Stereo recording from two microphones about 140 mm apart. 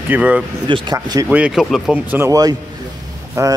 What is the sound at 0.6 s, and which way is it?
Speech, 35° right (ahead or behind).